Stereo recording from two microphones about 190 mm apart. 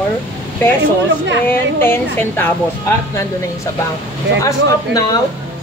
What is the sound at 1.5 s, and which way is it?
Speech, 10° left (ahead or behind).